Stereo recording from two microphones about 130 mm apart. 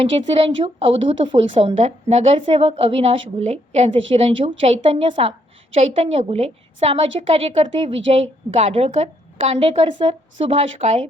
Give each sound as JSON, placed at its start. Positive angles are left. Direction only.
{"t": 0.0, "sound": "a woman's voice", "side_deg": -45}